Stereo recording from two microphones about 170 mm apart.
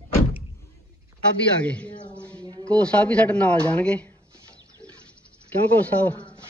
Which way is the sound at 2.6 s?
5° left (ahead or behind).